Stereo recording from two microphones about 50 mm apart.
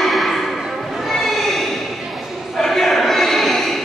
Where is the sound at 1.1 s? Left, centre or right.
Centre.